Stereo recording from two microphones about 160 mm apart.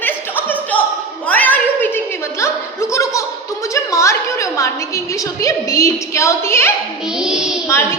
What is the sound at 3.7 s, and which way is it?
A woman's voice, 20° left (ahead or behind).